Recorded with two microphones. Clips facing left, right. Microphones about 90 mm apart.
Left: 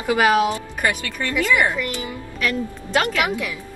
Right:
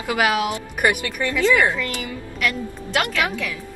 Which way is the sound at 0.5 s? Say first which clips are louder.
Right 2 dB; 20° right (ahead or behind).